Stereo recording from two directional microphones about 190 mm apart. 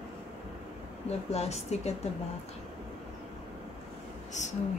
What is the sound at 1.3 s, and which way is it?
Speech, 35° left (ahead or behind).